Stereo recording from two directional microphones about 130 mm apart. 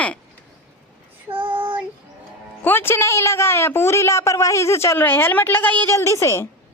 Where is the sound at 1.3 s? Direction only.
40° right (ahead or behind).